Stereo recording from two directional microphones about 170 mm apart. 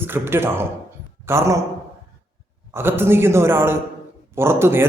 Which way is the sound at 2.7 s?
15° right (ahead or behind).